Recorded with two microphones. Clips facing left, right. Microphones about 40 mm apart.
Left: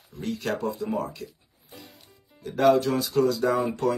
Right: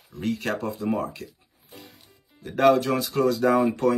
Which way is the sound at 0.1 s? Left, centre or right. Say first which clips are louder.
Right 2 dB; right.